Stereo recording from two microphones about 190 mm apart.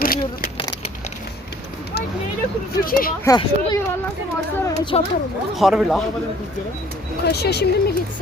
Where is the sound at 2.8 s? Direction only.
50° left (ahead or behind).